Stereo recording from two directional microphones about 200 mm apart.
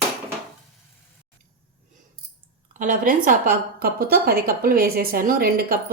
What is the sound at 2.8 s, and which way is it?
A woman's voice, 40° right (ahead or behind).